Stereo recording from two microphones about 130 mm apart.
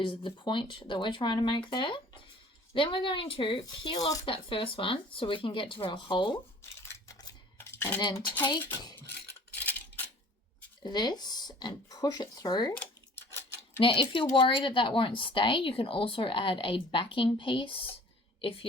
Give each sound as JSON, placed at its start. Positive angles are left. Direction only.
{"t": 0.0, "sound": "a woman's voice", "side_deg": 45}
{"t": 6.6, "sound": "a sound", "side_deg": 20}
{"t": 7.6, "sound": "cutlery", "side_deg": 20}
{"t": 9.6, "sound": "a sound", "side_deg": 15}
{"t": 10.8, "sound": "a woman's voice", "side_deg": 35}
{"t": 12.7, "sound": "dishes", "side_deg": 15}
{"t": 13.7, "sound": "a woman's voice", "side_deg": 40}